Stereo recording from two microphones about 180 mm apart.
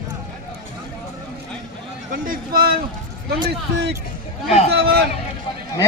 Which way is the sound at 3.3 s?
65° right (ahead or behind).